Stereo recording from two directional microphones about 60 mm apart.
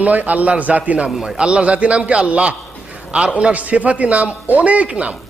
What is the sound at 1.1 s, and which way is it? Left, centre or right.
Speech, centre.